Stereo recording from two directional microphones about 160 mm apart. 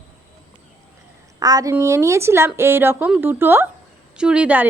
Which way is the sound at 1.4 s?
20° right (ahead or behind).